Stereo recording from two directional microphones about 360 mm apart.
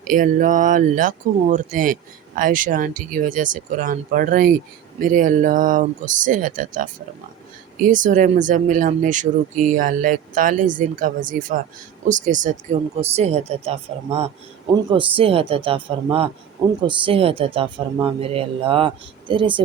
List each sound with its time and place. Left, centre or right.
0.1 s speech: right